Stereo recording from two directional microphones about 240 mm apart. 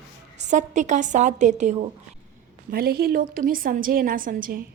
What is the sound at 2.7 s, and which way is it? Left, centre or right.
A woman's voice, right.